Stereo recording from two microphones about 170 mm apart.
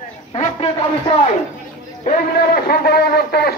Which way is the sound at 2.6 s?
65° left (ahead or behind).